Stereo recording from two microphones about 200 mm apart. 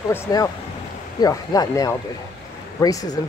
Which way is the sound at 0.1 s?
15° left (ahead or behind).